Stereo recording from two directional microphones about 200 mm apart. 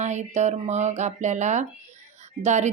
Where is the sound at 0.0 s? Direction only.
35° right (ahead or behind).